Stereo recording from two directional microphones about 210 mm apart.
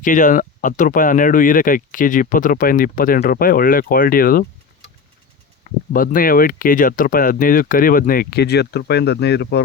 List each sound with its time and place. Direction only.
0.0 s speech: 40° left (ahead or behind)
5.6 s speech: 40° left (ahead or behind)